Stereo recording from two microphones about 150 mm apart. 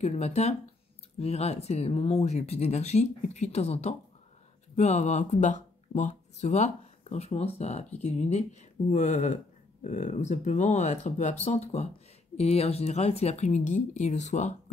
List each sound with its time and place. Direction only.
0.0 s speech: 45° left (ahead or behind)